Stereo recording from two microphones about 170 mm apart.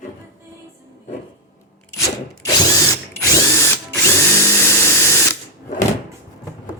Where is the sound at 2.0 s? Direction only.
20° left (ahead or behind).